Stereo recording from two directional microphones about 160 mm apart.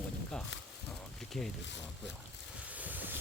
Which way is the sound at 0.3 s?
5° left (ahead or behind).